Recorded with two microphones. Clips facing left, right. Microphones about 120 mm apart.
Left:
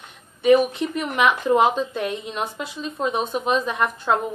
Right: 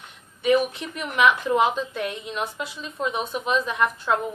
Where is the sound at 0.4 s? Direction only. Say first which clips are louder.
Left 5 dB; 40° left (ahead or behind).